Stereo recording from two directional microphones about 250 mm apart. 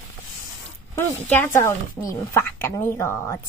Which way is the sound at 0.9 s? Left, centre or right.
Centre.